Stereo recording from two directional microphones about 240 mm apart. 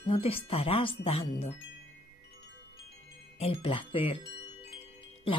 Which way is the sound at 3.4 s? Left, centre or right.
Left.